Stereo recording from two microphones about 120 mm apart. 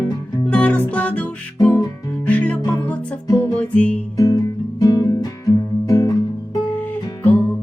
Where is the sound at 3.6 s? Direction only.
10° left (ahead or behind).